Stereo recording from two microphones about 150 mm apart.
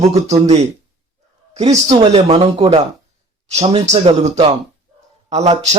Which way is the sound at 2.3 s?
40° right (ahead or behind).